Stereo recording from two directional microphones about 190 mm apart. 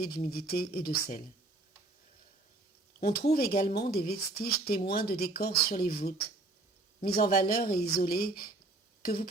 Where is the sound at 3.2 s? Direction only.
55° left (ahead or behind).